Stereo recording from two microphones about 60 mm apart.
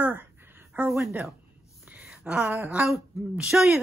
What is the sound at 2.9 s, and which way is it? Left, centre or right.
Speech, centre.